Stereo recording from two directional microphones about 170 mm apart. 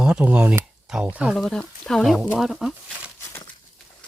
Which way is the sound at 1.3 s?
5° left (ahead or behind).